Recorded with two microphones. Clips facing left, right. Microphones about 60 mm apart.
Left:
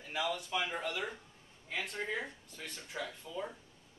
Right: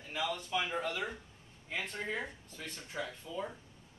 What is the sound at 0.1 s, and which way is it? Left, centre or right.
Speech, centre.